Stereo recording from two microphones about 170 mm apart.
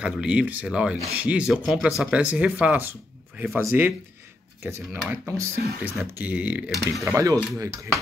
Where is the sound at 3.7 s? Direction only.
15° right (ahead or behind).